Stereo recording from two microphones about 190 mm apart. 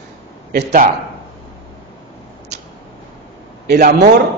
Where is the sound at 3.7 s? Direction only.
55° right (ahead or behind).